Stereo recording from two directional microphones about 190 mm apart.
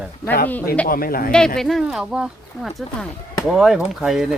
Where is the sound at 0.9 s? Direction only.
50° left (ahead or behind).